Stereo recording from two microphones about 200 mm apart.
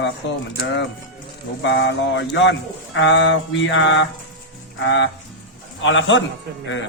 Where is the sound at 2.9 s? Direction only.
60° left (ahead or behind).